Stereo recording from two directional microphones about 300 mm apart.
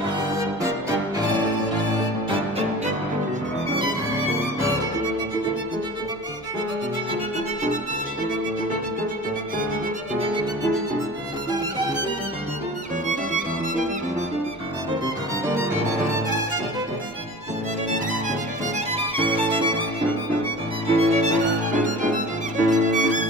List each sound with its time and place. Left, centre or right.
10.1 s violin: centre
13.1 s music: right
15.4 s music: centre
18.9 s music: centre
20.8 s music: right